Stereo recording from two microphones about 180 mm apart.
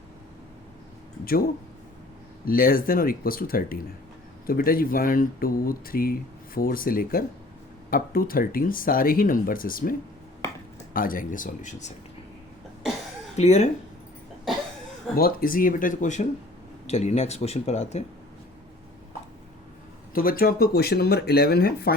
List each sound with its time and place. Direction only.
1.2 s speech: 55° left (ahead or behind)
10.9 s speech: 50° left (ahead or behind)
13.3 s speech: 35° left (ahead or behind)
15.1 s speech: 55° left (ahead or behind); by 18.0 s 35° left (ahead or behind)
20.1 s speech: 55° left (ahead or behind)